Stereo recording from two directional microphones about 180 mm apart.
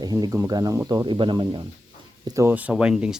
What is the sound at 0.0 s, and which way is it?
Speech, 20° right (ahead or behind).